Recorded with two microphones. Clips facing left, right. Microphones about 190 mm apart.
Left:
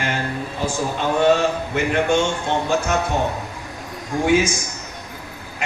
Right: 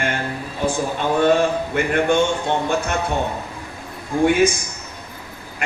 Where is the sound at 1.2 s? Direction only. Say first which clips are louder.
Even; 55° right (ahead or behind).